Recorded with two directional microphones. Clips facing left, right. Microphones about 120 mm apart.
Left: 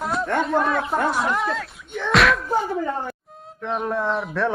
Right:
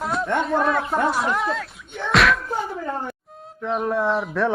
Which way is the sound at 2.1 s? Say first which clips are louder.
Even; centre (ahead or behind).